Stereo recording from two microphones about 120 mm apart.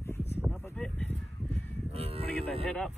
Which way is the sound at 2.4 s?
5° left (ahead or behind).